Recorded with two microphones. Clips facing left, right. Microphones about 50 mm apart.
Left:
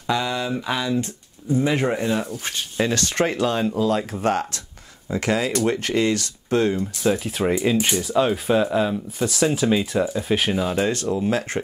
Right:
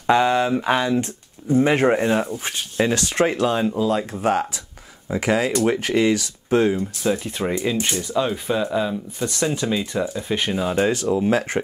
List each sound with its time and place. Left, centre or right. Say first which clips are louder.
0.0 s speech: right 6 dB; right
2.2 s speech: right 1 dB; centre
7.0 s speech: left 1 dB; centre
11.2 s speech: right 2 dB; right